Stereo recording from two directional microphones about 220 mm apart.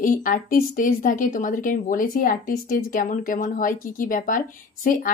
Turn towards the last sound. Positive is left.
turn(degrees=40)  # may be behind; listen again after turning